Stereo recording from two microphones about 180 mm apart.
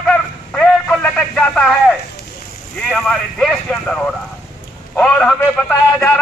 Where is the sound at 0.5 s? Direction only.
5° left (ahead or behind).